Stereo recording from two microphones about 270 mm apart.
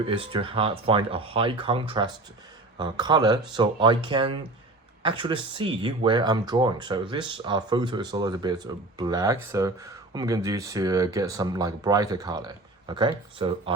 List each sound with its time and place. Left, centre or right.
0.0 s speech: centre